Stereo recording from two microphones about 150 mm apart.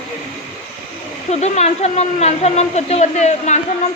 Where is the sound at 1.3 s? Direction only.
45° left (ahead or behind).